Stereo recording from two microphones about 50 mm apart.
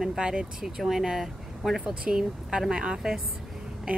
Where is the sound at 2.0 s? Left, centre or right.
Centre.